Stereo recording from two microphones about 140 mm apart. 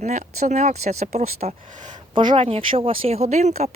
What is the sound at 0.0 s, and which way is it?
Speech, 60° right (ahead or behind).